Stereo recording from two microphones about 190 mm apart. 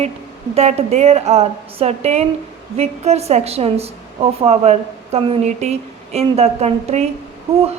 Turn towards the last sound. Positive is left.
turn(degrees=-30)  # may be behind; listen again after turning